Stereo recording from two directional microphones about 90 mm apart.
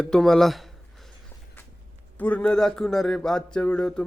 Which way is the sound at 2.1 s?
15° left (ahead or behind).